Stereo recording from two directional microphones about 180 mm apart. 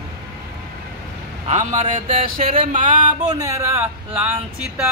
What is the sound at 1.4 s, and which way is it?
Speech, 40° right (ahead or behind).